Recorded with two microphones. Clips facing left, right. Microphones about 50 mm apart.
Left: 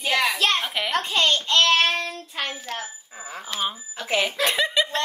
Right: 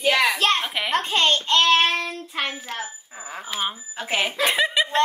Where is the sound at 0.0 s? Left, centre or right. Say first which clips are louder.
Right 2 dB; right.